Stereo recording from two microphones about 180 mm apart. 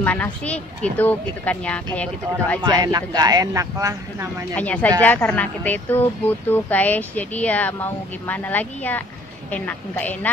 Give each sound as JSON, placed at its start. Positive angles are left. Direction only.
{"t": 0.0, "sound": "speech", "side_deg": 10}
{"t": 2.6, "sound": "speech", "side_deg": -20}
{"t": 4.6, "sound": "speech", "side_deg": 10}